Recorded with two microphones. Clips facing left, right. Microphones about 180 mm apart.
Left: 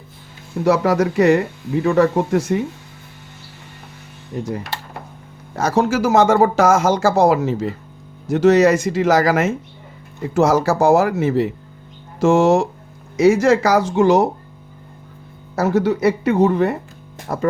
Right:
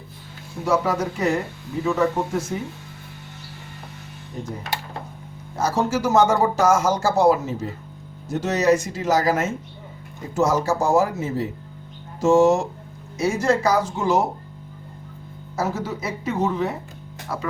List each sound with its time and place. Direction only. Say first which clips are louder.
0.6 s speech: left 6 dB; 75° left (ahead or behind)
5.5 s speech: left 5 dB; 90° left; by 14.3 s 70° left (ahead or behind)
15.5 s speech: left 9 dB; 70° left (ahead or behind)
17.3 s speech: left 7 dB; 50° left (ahead or behind)